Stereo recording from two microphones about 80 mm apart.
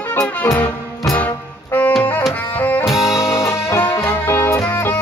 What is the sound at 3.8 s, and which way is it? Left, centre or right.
Music, left.